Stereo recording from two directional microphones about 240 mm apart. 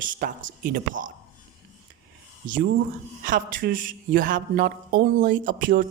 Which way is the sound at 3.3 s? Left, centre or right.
Right.